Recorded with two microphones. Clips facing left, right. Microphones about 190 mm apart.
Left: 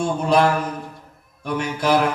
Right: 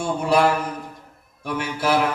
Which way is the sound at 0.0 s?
10° right (ahead or behind).